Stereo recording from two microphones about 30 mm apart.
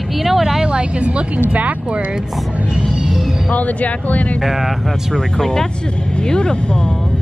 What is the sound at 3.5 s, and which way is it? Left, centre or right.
Speech, left.